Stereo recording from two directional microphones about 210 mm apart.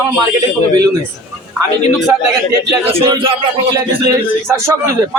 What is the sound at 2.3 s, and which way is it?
Speech, 15° right (ahead or behind).